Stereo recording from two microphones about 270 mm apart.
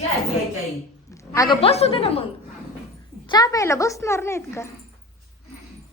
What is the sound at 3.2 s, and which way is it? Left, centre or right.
A woman's voice, centre.